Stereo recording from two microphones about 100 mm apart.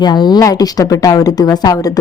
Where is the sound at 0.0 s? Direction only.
45° left (ahead or behind).